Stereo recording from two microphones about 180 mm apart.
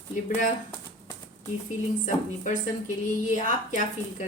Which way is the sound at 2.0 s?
45° left (ahead or behind).